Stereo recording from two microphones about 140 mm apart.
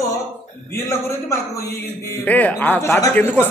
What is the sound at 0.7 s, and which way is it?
A man's voice, 20° left (ahead or behind).